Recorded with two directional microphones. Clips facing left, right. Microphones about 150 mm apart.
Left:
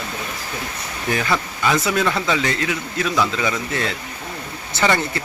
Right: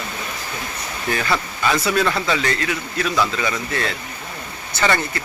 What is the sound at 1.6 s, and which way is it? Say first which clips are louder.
A man's voice: even; 20° left (ahead or behind).